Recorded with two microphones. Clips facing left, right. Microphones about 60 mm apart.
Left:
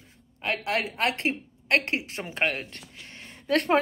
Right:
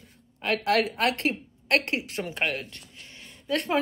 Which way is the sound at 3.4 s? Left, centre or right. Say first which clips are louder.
Left 4 dB; left.